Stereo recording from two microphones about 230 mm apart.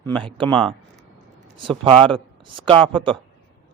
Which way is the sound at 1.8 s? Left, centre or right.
Right.